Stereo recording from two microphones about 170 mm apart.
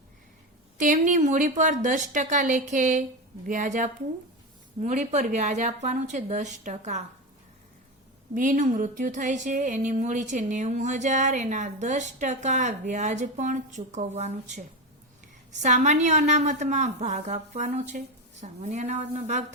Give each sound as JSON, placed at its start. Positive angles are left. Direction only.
{"t": 0.8, "sound": "speech", "side_deg": -50}
{"t": 8.4, "sound": "a woman's voice", "side_deg": -50}
{"t": 15.6, "sound": "speech", "side_deg": -45}